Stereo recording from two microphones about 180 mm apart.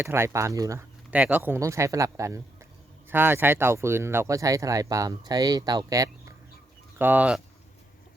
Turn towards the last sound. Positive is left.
turn(degrees=-5)  # may be behind; listen again after turning